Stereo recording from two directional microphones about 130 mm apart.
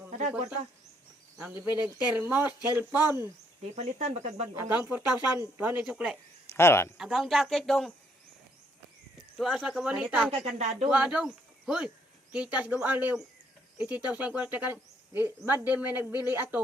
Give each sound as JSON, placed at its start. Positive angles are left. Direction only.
{"t": 0.2, "sound": "speech", "side_deg": -55}
{"t": 1.5, "sound": "speech", "side_deg": -15}
{"t": 3.8, "sound": "speech", "side_deg": -55}
{"t": 4.6, "sound": "speech", "side_deg": -15}
{"t": 6.5, "sound": "speech", "side_deg": 20}
{"t": 6.9, "sound": "speech", "side_deg": -5}
{"t": 9.4, "sound": "speech", "side_deg": 0}